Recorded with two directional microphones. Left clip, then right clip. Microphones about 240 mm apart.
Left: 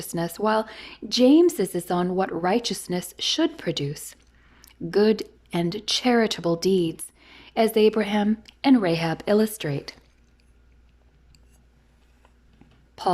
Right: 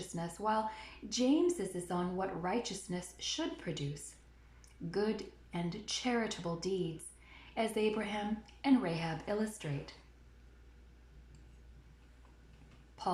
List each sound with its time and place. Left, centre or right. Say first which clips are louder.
0.1 s speech: left 12 dB; left
13.0 s speech: left 13 dB; left